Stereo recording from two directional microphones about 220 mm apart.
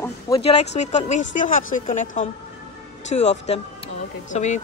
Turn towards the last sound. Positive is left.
turn(degrees=30)  # may be behind; listen again after turning